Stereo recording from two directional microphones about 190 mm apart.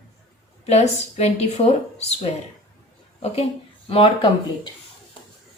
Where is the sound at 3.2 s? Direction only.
30° left (ahead or behind).